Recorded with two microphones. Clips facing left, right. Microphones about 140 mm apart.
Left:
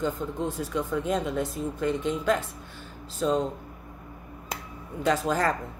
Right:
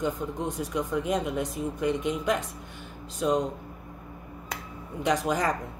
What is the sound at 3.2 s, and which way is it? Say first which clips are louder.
Speech: even; 10° right (ahead or behind).